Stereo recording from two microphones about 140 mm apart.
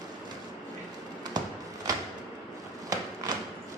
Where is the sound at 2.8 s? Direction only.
25° right (ahead or behind).